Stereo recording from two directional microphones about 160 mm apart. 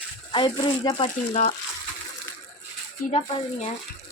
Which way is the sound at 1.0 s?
50° left (ahead or behind).